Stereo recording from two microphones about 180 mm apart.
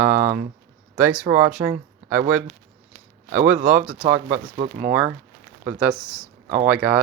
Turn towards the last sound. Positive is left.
turn(degrees=-5)  # may be behind; listen again after turning